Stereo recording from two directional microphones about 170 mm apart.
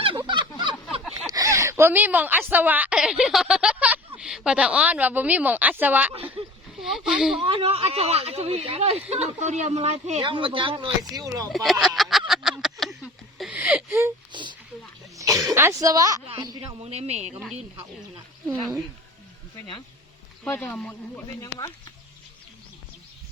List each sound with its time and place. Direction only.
0.2 s a sound: 25° right (ahead or behind); by 2.4 s 10° right (ahead or behind)
2.5 s a woman's voice: 10° right (ahead or behind)
7.4 s speech: 35° right (ahead or behind)
11.5 s a sound: centre (ahead or behind)
14.3 s a sound: 25° right (ahead or behind)
15.1 s throat clearing: 20° right (ahead or behind)
15.5 s speech: 15° right (ahead or behind); by 17.4 s 40° right (ahead or behind)
18.4 s speech: 5° left (ahead or behind)
20.4 s speech: 10° left (ahead or behind)